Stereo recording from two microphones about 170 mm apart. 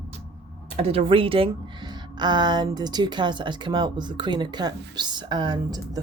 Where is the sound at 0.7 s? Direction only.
35° right (ahead or behind).